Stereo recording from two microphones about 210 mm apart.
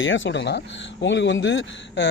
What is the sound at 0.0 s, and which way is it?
A man's voice, 65° left (ahead or behind).